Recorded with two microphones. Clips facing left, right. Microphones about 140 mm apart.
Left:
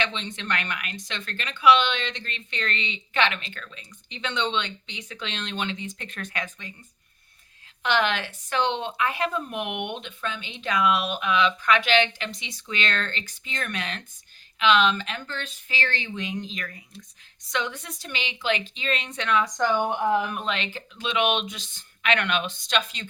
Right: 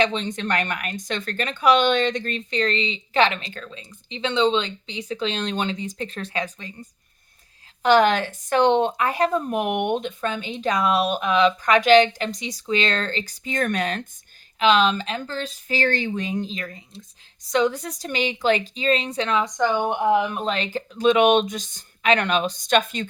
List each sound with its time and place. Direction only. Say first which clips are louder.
0.0 s speech: right 8 dB; 40° right (ahead or behind)
7.8 s speech: right 8 dB; 40° right (ahead or behind); by 17.1 s 25° right (ahead or behind)
17.5 s speech: right 9 dB; 35° right (ahead or behind)
19.5 s speech: right 2 dB; 15° right (ahead or behind)
20.4 s speech: right 5 dB; 40° right (ahead or behind)